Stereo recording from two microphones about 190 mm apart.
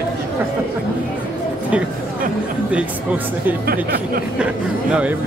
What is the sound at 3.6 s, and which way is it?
Speech, 55° right (ahead or behind).